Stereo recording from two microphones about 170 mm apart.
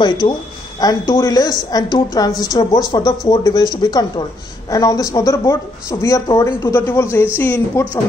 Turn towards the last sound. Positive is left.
turn(degrees=15)  # may be behind; listen again after turning